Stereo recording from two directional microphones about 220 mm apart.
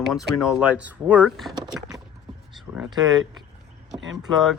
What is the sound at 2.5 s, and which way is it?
Speech, 5° right (ahead or behind).